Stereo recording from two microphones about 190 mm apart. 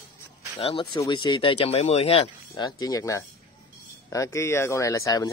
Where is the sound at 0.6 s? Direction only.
25° left (ahead or behind).